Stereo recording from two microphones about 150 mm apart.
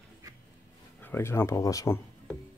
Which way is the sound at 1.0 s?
15° left (ahead or behind).